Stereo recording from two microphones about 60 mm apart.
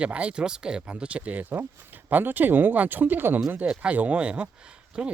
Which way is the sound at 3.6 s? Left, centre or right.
Centre.